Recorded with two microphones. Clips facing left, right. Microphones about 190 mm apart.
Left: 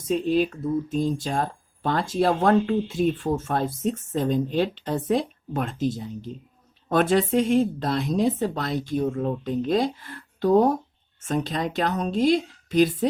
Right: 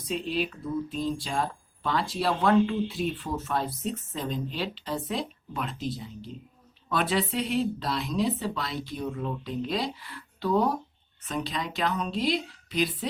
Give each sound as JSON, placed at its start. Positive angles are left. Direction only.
{"t": 0.0, "sound": "speech", "side_deg": 45}